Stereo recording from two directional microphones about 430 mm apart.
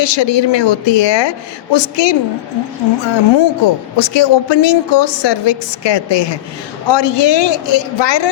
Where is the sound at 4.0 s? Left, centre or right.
Left.